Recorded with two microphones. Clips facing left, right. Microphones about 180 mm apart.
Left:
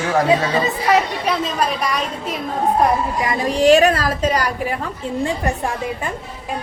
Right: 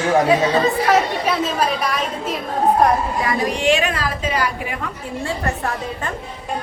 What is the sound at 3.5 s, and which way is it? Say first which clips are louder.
A woman's voice: left 11 dB; 40° left (ahead or behind).